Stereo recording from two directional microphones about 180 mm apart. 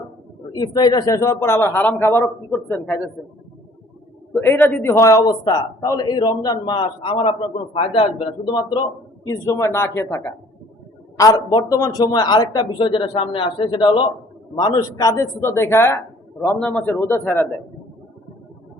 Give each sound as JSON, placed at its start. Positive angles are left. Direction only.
{"t": 0.5, "sound": "a man's voice", "side_deg": 20}
{"t": 4.4, "sound": "a man's voice", "side_deg": 10}